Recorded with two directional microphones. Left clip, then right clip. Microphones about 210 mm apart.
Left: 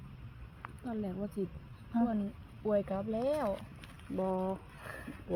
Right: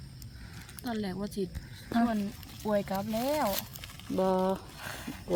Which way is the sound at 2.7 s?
30° left (ahead or behind).